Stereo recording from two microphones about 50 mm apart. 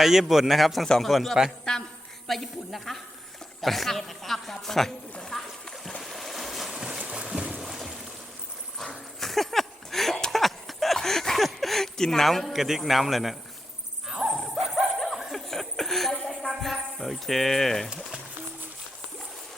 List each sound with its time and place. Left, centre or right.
0.0 s a man's voice: centre
1.7 s a sound: centre
2.2 s a man's voice: centre
5.3 s splash: centre
6.0 s boat: centre
6.7 s boat: centre
8.8 s dog: centre
14.2 s dog: right
14.9 s dog: centre
15.3 s a sound: centre
17.8 s speech: centre